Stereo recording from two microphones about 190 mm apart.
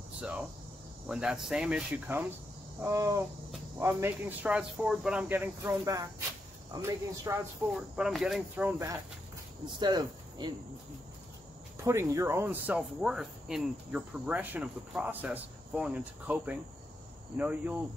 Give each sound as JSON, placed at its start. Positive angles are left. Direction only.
{"t": 1.0, "sound": "speech", "side_deg": -5}
{"t": 7.7, "sound": "speech", "side_deg": -5}
{"t": 9.8, "sound": "speech", "side_deg": -25}
{"t": 11.8, "sound": "speech", "side_deg": -15}